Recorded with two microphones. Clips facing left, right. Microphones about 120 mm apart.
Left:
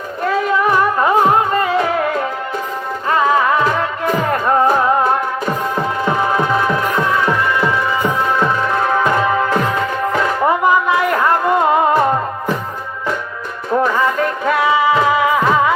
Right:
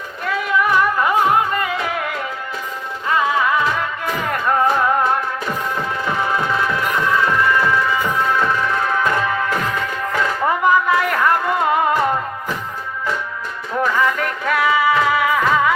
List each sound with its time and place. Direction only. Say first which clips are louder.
0.3 s music: left 3 dB; 35° left (ahead or behind)
3.1 s music: left 3 dB; 40° left (ahead or behind)
6.1 s music: left 4 dB; 25° left (ahead or behind)
13.9 s music: left 3 dB; 25° left (ahead or behind)